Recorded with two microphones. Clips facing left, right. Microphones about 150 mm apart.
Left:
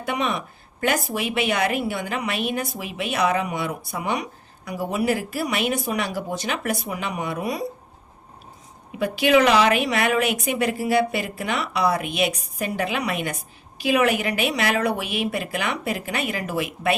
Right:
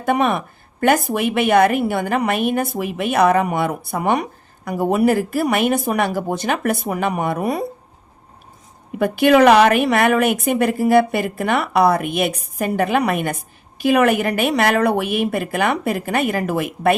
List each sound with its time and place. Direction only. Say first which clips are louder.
0.0 s speech: right 7 dB; 55° right (ahead or behind)
9.0 s speech: right 5 dB; 55° right (ahead or behind)